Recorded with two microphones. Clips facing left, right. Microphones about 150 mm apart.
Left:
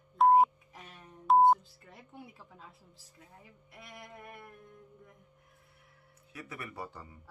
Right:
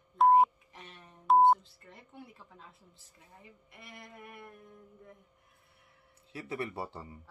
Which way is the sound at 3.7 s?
Centre (ahead or behind).